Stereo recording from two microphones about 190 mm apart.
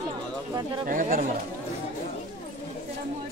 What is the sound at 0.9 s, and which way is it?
Speech, 45° right (ahead or behind).